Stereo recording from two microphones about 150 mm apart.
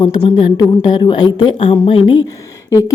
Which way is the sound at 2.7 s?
20° left (ahead or behind).